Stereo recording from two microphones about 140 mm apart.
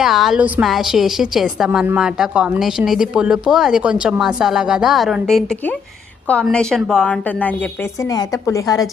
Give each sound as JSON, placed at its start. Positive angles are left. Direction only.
{"t": 0.0, "sound": "a woman's voice", "side_deg": 0}
{"t": 8.1, "sound": "a woman's voice", "side_deg": 25}